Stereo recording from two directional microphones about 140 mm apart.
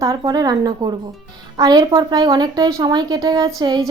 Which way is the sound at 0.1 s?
30° right (ahead or behind).